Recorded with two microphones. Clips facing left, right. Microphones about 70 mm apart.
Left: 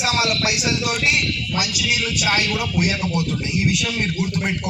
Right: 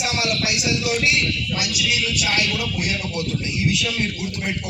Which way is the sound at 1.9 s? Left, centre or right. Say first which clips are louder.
Left 3 dB; left.